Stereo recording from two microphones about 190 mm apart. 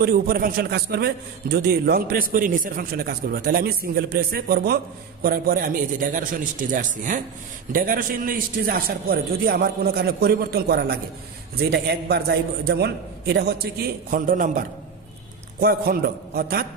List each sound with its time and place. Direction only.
0.0 s a man's voice: 50° right (ahead or behind)
15.6 s a man's voice: 55° right (ahead or behind)